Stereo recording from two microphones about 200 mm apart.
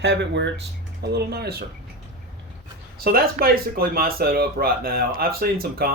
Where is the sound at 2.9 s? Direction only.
50° right (ahead or behind).